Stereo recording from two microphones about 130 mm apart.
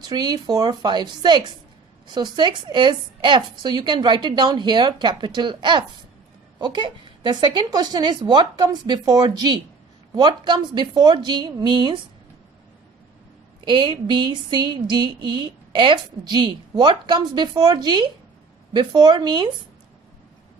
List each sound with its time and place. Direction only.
0.0 s speech: 30° right (ahead or behind)
13.7 s speech: 40° right (ahead or behind)